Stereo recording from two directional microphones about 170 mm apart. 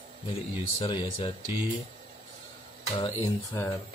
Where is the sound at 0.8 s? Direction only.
25° left (ahead or behind).